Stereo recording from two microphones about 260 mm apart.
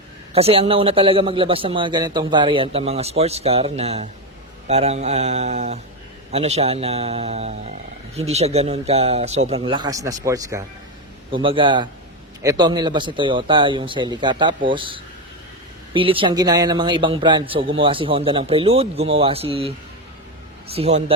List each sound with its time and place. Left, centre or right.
0.3 s speech: right
20.7 s speech: right